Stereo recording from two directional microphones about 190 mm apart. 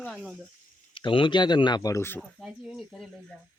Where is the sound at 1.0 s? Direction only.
25° left (ahead or behind).